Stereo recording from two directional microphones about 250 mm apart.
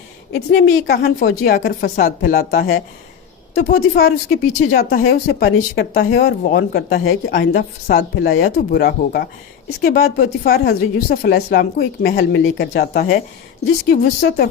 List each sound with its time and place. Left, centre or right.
0.3 s speech: left